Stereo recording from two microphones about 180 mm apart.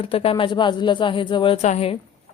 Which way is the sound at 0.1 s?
30° left (ahead or behind).